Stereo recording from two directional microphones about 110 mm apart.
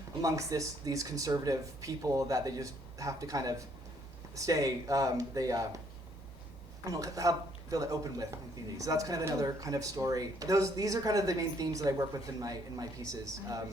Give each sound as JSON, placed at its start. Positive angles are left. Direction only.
{"t": 0.2, "sound": "speech", "side_deg": -30}
{"t": 6.8, "sound": "speech", "side_deg": -30}